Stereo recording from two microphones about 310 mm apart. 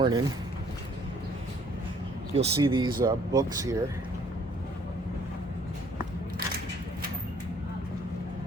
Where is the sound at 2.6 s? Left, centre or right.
Centre.